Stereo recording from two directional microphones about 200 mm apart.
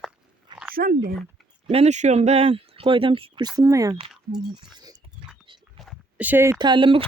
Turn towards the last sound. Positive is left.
turn(degrees=-25)  # may be behind; listen again after turning